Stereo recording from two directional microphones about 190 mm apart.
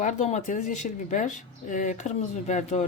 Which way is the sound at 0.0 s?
35° left (ahead or behind).